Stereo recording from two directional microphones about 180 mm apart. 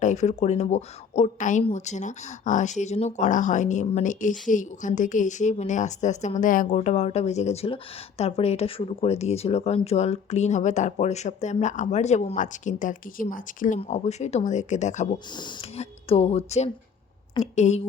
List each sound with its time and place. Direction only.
0.0 s speech: 40° left (ahead or behind)
13.7 s speech: 35° left (ahead or behind)